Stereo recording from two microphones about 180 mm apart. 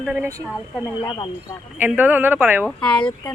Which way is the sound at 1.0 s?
25° left (ahead or behind).